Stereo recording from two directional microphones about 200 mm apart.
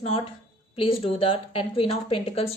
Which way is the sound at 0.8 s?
30° left (ahead or behind).